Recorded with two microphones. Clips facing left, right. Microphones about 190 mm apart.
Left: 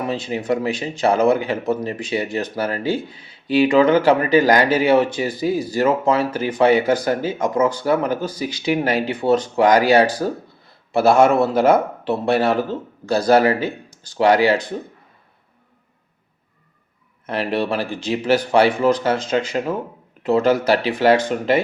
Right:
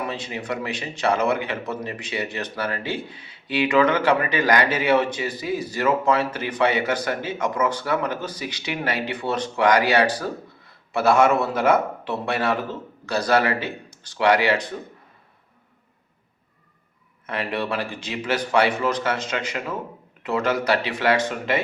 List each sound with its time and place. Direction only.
0.0 s speech: 35° left (ahead or behind)
3.5 s a man's voice: 30° left (ahead or behind)
17.2 s speech: 35° left (ahead or behind)